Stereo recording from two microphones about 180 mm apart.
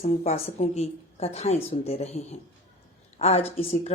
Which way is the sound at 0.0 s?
35° left (ahead or behind).